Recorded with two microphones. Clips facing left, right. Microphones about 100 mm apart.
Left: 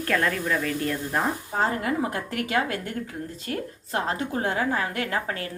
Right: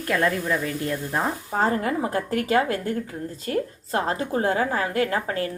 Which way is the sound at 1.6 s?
35° right (ahead or behind).